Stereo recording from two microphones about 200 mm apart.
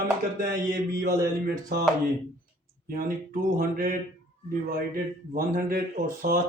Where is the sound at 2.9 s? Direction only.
45° right (ahead or behind).